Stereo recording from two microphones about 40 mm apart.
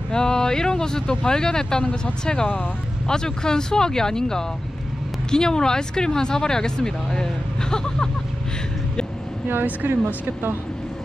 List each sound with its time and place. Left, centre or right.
0.1 s speech: centre
7.7 s vehicle: centre
9.8 s speech: right